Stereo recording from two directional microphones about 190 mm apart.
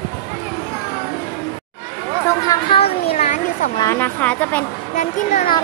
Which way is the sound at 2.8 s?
35° left (ahead or behind).